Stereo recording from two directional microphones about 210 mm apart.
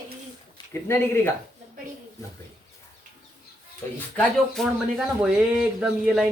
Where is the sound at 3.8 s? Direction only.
10° left (ahead or behind).